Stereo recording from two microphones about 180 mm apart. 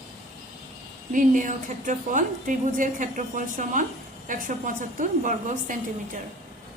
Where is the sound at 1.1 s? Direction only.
45° right (ahead or behind).